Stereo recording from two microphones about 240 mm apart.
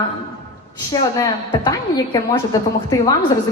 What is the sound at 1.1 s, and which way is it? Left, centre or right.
A woman's voice, centre.